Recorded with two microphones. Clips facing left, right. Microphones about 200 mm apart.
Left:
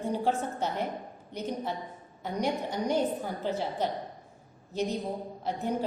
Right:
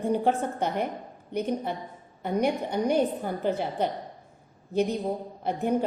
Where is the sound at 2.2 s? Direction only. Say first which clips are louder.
Right 5 dB; 60° right (ahead or behind).